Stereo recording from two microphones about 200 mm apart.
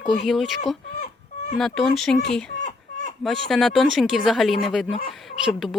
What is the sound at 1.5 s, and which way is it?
Speech, centre (ahead or behind).